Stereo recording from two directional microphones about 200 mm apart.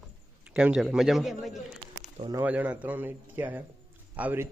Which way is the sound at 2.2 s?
20° right (ahead or behind).